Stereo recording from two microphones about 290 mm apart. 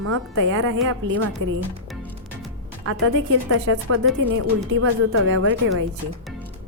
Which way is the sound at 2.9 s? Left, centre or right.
Right.